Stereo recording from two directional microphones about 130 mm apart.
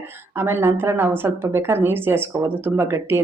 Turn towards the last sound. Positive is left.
turn(degrees=-20)  # may be behind; listen again after turning